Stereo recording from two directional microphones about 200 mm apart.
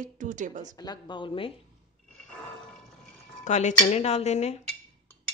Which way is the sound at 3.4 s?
35° left (ahead or behind).